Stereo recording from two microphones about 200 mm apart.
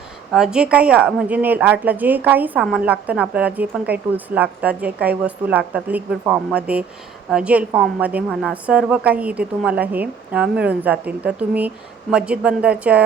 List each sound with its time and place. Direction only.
0.3 s a woman's voice: 5° right (ahead or behind)